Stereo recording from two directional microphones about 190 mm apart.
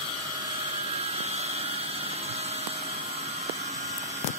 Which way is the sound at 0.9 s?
35° right (ahead or behind).